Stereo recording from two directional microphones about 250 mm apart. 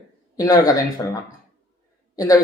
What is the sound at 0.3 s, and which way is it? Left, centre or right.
Speech, centre.